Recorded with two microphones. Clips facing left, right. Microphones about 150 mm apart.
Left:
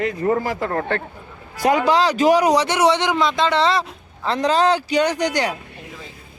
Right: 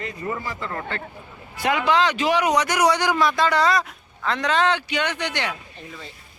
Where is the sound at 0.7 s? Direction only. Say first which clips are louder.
Left 8 dB; 55° left (ahead or behind).